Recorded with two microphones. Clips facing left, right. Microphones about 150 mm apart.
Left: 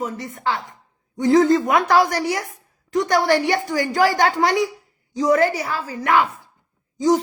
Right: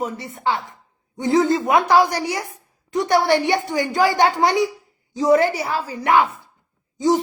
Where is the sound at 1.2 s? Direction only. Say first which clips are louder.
Left 3 dB; 15° right (ahead or behind).